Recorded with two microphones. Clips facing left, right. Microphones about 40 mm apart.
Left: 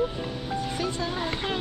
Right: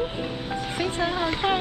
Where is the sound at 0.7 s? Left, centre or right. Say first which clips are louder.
Right 4 dB; right.